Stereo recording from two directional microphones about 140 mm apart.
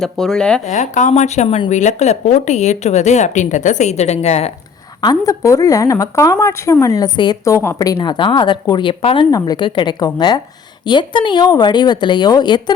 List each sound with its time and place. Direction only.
0.0 s speech: 5° left (ahead or behind)
0.6 s speech: 60° left (ahead or behind); by 1.7 s 45° left (ahead or behind)
1.7 s speech: 55° left (ahead or behind)
4.9 s a woman's voice: 25° left (ahead or behind)